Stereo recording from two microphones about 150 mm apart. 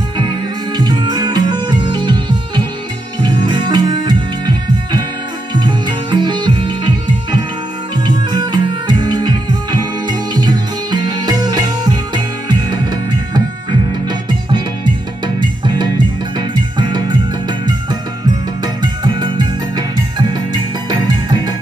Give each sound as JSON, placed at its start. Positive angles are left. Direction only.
{"t": 0.2, "sound": "music", "side_deg": -30}
{"t": 8.3, "sound": "music", "side_deg": -30}
{"t": 13.3, "sound": "music", "side_deg": -30}
{"t": 18.6, "sound": "music", "side_deg": -30}